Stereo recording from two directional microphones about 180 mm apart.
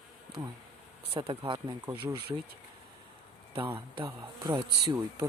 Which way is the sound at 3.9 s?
20° right (ahead or behind).